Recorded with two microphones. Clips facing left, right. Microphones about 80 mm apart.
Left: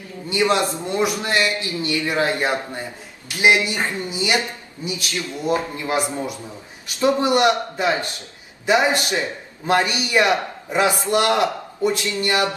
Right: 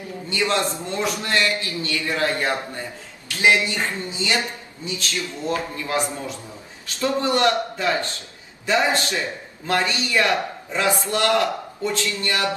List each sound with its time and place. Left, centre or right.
0.3 s a man's voice: centre